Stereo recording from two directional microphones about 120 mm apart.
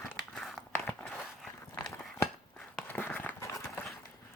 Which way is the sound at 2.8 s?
15° left (ahead or behind).